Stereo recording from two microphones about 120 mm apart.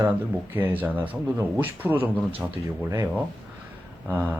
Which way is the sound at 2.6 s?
30° right (ahead or behind).